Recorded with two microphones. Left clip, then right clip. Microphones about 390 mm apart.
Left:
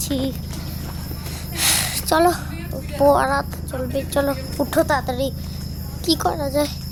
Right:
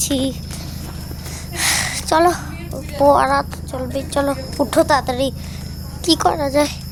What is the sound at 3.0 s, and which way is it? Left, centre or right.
A child's voice, left.